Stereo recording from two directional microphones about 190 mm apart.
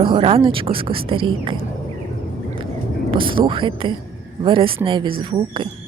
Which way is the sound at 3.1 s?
25° right (ahead or behind).